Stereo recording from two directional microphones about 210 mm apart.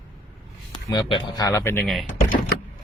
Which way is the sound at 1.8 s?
Centre (ahead or behind).